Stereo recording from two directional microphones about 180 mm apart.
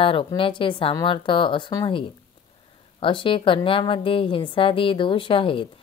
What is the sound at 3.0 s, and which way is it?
A woman's voice, 30° left (ahead or behind).